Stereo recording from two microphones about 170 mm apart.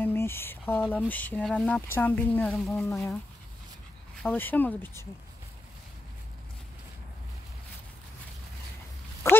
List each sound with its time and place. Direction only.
0.0 s a sound: 15° left (ahead or behind)
0.9 s speech: 10° left (ahead or behind)
2.8 s speech: 15° left (ahead or behind)
4.2 s speech: 10° left (ahead or behind)
9.2 s speech: 15° left (ahead or behind)